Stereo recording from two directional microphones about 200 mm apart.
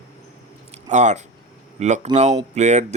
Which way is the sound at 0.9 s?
35° right (ahead or behind).